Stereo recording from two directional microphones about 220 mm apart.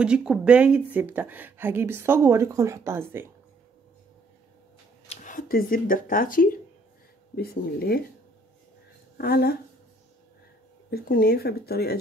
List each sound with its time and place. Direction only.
0.0 s speech: 5° right (ahead or behind)
5.0 s speech: 30° left (ahead or behind)
9.2 s speech: 45° left (ahead or behind)
10.9 s speech: 45° left (ahead or behind)